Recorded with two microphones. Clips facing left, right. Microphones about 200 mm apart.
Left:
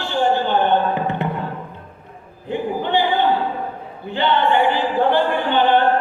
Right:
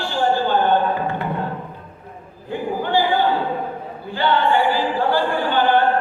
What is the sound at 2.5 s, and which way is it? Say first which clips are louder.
Choir: left 1 dB; 20° left (ahead or behind).